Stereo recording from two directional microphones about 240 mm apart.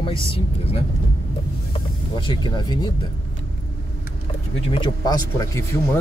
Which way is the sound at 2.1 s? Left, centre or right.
Centre.